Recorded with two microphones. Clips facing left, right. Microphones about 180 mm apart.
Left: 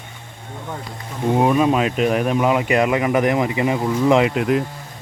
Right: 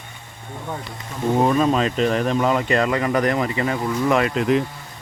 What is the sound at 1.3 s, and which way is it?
Speech, 10° left (ahead or behind).